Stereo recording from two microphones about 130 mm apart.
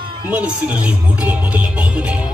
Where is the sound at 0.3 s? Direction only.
10° right (ahead or behind).